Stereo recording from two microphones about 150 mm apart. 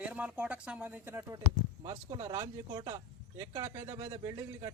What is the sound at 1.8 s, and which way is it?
Speech, 30° right (ahead or behind).